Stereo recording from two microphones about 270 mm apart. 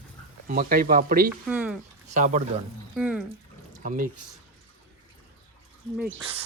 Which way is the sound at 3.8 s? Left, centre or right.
Right.